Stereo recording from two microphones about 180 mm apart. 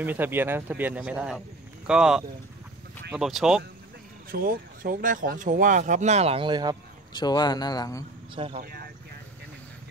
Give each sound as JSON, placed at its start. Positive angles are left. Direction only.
{"t": 0.0, "sound": "speech", "side_deg": -10}
{"t": 4.3, "sound": "speech", "side_deg": -50}
{"t": 7.2, "sound": "speech", "side_deg": 25}
{"t": 8.4, "sound": "speech", "side_deg": -35}